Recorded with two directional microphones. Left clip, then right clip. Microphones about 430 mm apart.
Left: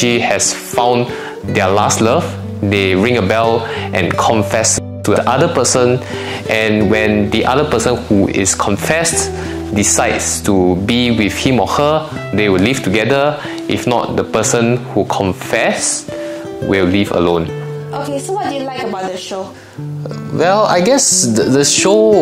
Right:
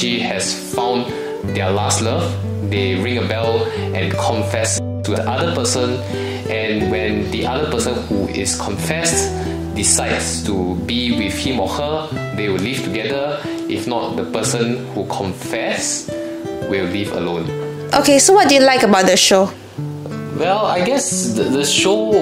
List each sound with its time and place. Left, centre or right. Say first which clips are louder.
0.0 s speech: left 6 dB; left
17.9 s a woman's voice: right 10 dB; right
20.3 s speech: left 5 dB; left